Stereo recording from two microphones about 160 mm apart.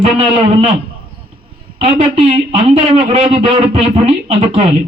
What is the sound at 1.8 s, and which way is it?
Speech, 40° right (ahead or behind).